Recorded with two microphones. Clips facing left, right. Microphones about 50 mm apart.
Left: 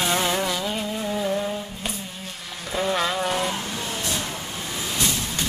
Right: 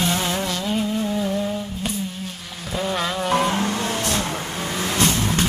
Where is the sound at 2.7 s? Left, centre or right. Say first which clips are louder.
Even; centre.